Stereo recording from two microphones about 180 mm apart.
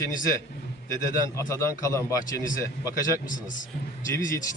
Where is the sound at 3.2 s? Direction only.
45° left (ahead or behind).